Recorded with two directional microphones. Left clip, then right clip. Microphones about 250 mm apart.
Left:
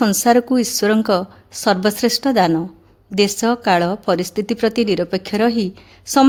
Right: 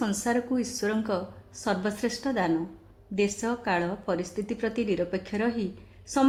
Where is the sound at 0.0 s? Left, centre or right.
Left.